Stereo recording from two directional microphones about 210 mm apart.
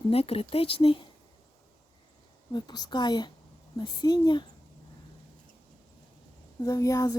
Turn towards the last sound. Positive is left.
turn(degrees=15)  # may be behind; listen again after turning